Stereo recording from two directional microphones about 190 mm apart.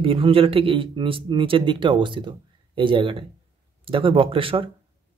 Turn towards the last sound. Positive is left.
turn(degrees=-30)  # may be behind; listen again after turning